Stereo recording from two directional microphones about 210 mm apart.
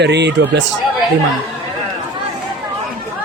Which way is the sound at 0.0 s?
55° right (ahead or behind).